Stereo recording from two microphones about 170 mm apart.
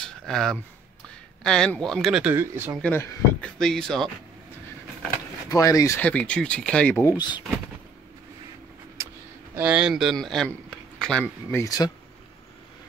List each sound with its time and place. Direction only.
0.0 s a sound: centre (ahead or behind)
1.4 s speech: 5° left (ahead or behind)
2.3 s speech: 15° right (ahead or behind)
2.8 s speech: 15° left (ahead or behind)
3.5 s speech: centre (ahead or behind)
5.5 s speech: 20° left (ahead or behind)
7.2 s speech: 25° left (ahead or behind)
9.6 s speech: 5° right (ahead or behind)
11.5 s speech: 20° left (ahead or behind)